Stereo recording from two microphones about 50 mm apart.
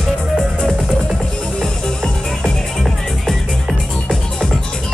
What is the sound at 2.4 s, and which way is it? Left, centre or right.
Music, centre.